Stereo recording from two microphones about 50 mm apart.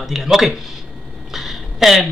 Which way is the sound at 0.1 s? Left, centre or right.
Centre.